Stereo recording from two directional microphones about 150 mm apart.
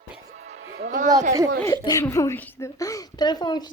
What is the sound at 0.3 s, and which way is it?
Music, 45° right (ahead or behind).